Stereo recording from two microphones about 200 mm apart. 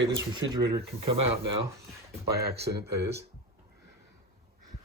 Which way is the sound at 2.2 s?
55° right (ahead or behind).